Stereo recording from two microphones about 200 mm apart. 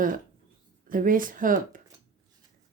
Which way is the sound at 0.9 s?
45° right (ahead or behind).